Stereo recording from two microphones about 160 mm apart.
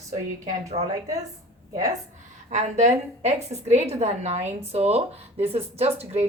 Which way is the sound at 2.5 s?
45° right (ahead or behind).